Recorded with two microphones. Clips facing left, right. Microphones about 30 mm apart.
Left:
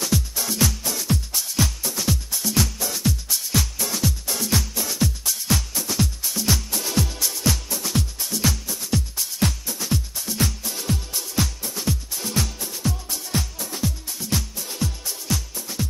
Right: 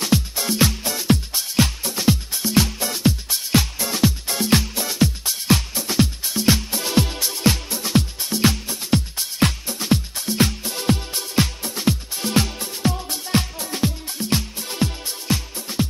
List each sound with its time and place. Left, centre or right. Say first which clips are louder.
0.0 s music: right 4 dB; right